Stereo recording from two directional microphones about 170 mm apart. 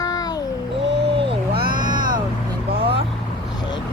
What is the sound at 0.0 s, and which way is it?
Child singing, 20° left (ahead or behind).